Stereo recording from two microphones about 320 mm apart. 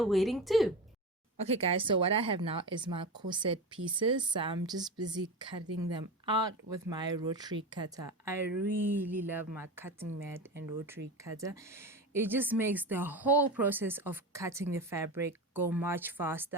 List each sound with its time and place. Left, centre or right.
0.0 s speech: centre
1.4 s a woman's voice: centre